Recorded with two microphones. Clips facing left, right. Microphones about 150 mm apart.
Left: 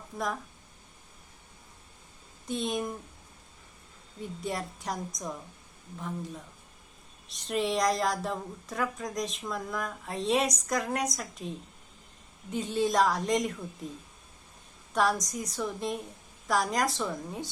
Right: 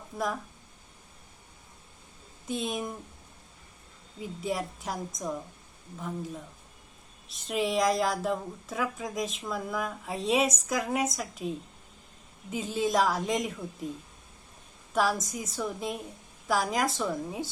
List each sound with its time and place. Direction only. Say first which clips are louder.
2.5 s a woman's voice: left 1 dB; centre (ahead or behind)
4.2 s a woman's voice: right 2 dB; centre (ahead or behind)
7.3 s a woman's voice: even; centre (ahead or behind)
14.9 s a woman's voice: even; centre (ahead or behind)